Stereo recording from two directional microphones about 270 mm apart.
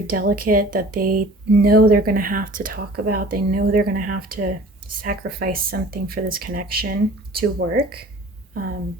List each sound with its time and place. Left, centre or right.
0.1 s speech: right